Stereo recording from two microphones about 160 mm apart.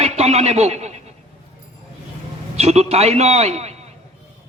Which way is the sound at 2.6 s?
40° right (ahead or behind).